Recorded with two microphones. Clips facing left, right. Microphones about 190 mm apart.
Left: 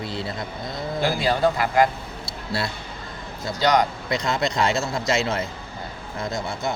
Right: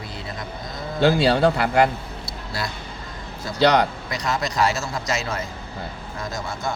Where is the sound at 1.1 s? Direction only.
75° right (ahead or behind).